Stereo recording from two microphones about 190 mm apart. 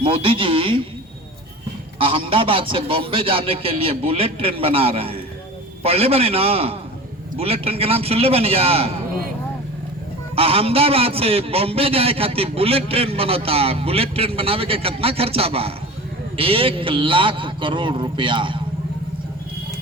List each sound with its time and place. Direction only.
0.0 s a man's voice: 30° right (ahead or behind)
2.0 s a man's voice: 30° right (ahead or behind)
10.3 s a man's voice: 30° right (ahead or behind)